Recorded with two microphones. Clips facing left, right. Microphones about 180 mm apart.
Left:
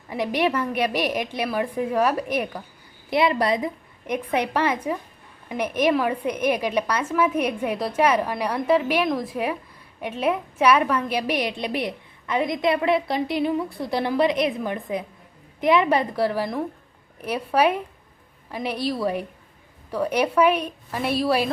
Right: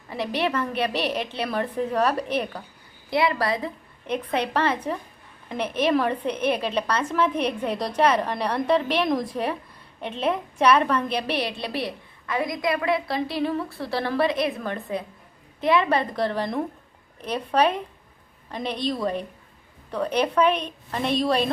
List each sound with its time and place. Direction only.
0.1 s a woman's voice: 15° left (ahead or behind)